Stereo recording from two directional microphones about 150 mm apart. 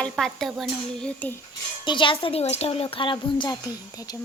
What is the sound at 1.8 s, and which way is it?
Speech, 35° left (ahead or behind).